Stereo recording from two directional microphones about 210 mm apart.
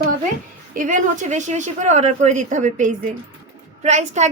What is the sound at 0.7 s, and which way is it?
A woman's voice, 40° right (ahead or behind).